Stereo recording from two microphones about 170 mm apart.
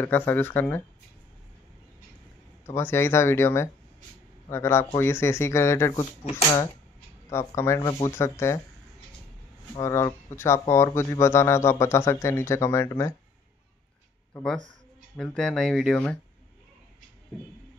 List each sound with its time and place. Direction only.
0.0 s speech: 10° left (ahead or behind)
2.6 s speech: 15° left (ahead or behind)
9.8 s speech: 20° left (ahead or behind)
14.3 s speech: 5° left (ahead or behind)